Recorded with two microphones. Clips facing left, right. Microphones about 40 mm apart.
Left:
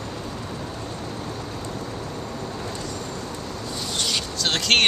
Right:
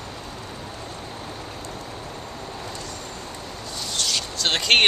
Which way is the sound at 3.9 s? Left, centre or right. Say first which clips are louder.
Even; centre.